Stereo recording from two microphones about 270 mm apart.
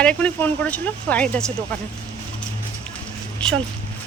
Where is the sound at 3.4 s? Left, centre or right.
Centre.